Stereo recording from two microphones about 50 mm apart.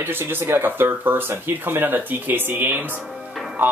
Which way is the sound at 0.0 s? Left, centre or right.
Right.